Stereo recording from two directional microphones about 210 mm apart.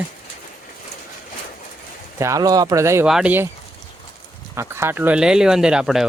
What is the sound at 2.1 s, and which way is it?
Speech, 15° right (ahead or behind).